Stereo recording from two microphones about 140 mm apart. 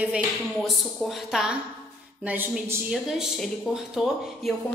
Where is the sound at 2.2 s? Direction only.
15° right (ahead or behind).